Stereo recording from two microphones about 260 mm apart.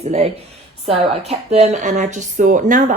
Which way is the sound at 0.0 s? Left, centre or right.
Right.